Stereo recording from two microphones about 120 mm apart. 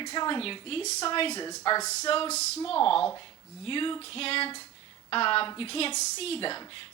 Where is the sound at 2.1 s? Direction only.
55° left (ahead or behind).